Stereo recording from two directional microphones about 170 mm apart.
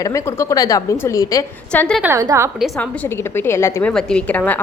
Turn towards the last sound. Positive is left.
turn(degrees=10)  # may be behind; listen again after turning